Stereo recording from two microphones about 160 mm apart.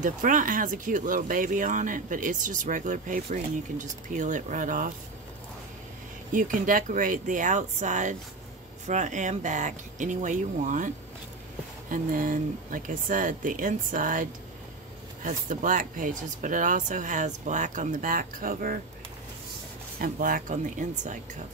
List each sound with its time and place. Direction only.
0.0 s speech: 55° right (ahead or behind)
6.3 s speech: 55° right (ahead or behind)
11.9 s speech: 60° right (ahead or behind)
15.2 s speech: 55° right (ahead or behind)
20.0 s speech: 60° right (ahead or behind)